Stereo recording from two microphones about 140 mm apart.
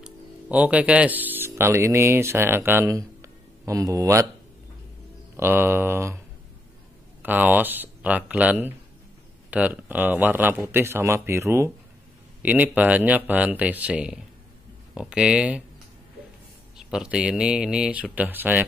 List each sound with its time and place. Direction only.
0.0 s speech: 10° right (ahead or behind)
5.3 s speech: 15° right (ahead or behind)
16.7 s speech: 5° right (ahead or behind)